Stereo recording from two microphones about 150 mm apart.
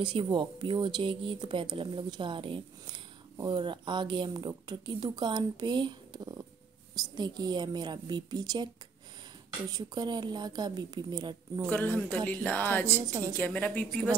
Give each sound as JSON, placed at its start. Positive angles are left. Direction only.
{"t": 0.0, "sound": "a woman's voice", "side_deg": -35}
{"t": 9.7, "sound": "a woman's voice", "side_deg": -25}
{"t": 11.7, "sound": "speech", "side_deg": 10}
{"t": 13.0, "sound": "a woman's voice", "side_deg": -25}
{"t": 13.4, "sound": "speech", "side_deg": 10}